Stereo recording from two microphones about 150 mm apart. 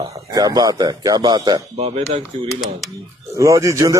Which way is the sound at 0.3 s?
25° right (ahead or behind).